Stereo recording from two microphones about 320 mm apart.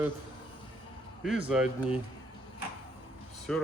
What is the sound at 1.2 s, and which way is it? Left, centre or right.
Speech, centre.